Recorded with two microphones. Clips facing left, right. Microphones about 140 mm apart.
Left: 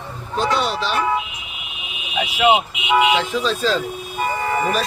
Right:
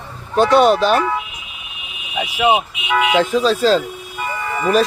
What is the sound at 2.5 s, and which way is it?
Speech, 20° left (ahead or behind).